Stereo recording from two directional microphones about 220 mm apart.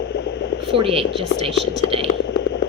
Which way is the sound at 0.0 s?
50° left (ahead or behind).